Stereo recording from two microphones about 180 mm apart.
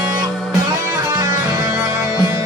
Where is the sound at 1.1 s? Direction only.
15° right (ahead or behind).